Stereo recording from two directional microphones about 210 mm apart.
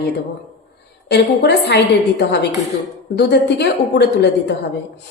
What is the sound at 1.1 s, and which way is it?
Speech, 50° left (ahead or behind).